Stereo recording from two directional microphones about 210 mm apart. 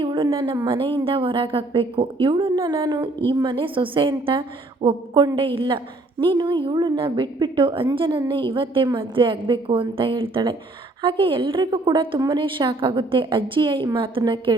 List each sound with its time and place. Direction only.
0.0 s a woman's voice: 25° right (ahead or behind)